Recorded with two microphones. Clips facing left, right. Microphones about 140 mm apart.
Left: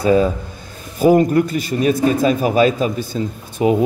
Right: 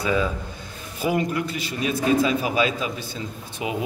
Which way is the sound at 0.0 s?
40° left (ahead or behind).